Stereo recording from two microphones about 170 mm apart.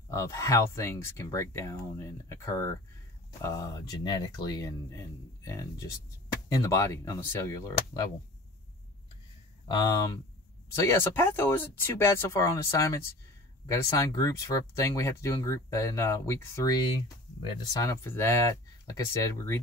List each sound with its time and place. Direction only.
0.1 s speech: 20° left (ahead or behind)
9.7 s speech: 20° left (ahead or behind)